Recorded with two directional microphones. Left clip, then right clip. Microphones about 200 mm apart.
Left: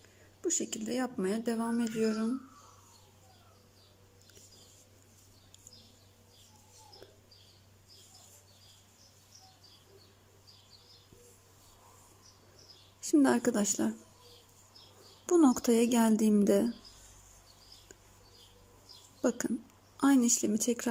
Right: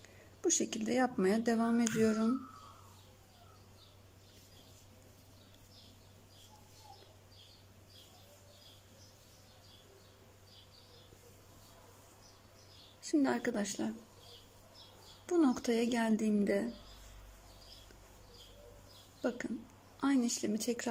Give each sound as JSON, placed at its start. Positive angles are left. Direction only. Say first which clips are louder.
{"t": 0.4, "sound": "speech", "louder": "right 1 dB", "side_deg": 10}
{"t": 13.0, "sound": "a woman's voice", "louder": "left 6 dB", "side_deg": 20}
{"t": 15.3, "sound": "speech", "louder": "left 6 dB", "side_deg": 20}
{"t": 19.2, "sound": "speech", "louder": "left 6 dB", "side_deg": 20}